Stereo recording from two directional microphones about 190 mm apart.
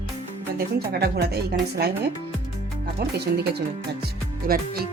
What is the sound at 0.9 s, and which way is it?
Speech, 55° right (ahead or behind).